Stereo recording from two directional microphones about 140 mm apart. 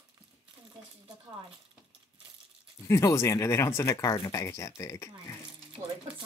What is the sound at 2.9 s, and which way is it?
Speech, 20° left (ahead or behind).